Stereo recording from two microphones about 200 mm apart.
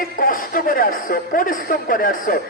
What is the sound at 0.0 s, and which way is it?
A man's voice, 45° left (ahead or behind).